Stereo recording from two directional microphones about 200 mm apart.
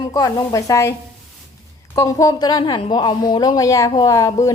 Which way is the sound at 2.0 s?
15° left (ahead or behind).